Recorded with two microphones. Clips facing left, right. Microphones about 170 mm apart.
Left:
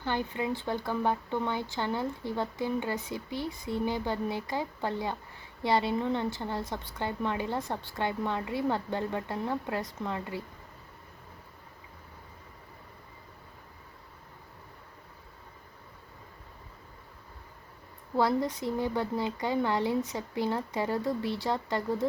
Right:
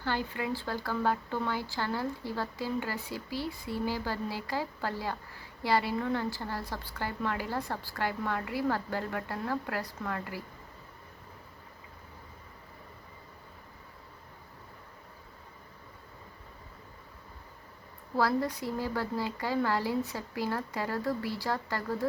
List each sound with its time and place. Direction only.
0.0 s speech: 20° left (ahead or behind)
18.2 s speech: 20° left (ahead or behind)